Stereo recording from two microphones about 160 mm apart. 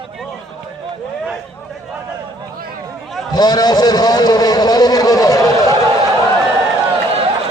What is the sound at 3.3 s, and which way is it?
A man's voice, 25° left (ahead or behind).